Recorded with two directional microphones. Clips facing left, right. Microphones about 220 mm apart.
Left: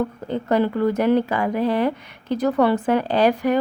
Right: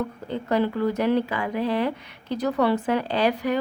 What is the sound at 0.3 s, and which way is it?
Speech, 50° left (ahead or behind).